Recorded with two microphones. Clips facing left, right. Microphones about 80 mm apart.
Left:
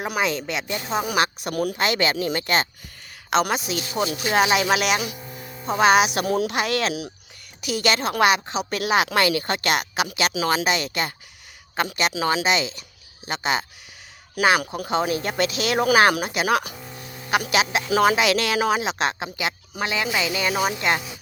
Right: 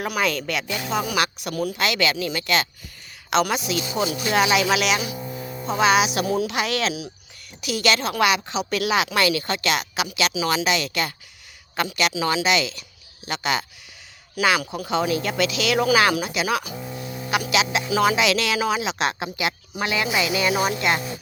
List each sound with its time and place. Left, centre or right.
0.1 s a woman's voice: left
14.4 s speech: left
14.8 s speech: left
17.4 s speech: left